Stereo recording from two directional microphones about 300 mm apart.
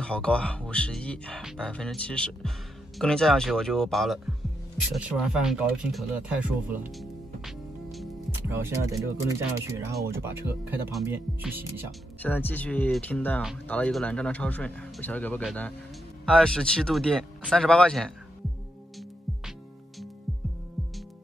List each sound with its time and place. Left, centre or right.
0.0 s speech: centre
12.2 s speech: centre